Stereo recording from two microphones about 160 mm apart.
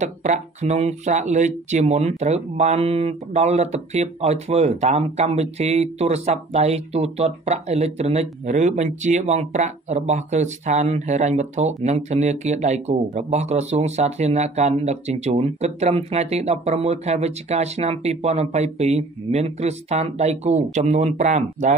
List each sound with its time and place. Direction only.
0.0 s speech: 45° right (ahead or behind)